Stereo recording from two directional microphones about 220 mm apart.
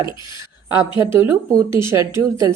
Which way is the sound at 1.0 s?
10° right (ahead or behind).